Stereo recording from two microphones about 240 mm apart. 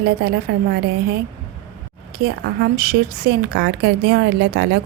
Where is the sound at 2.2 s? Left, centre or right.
Right.